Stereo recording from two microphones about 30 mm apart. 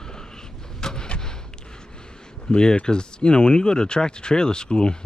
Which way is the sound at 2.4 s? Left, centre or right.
Left.